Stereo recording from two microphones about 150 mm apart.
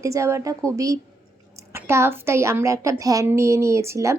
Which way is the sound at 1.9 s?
15° right (ahead or behind).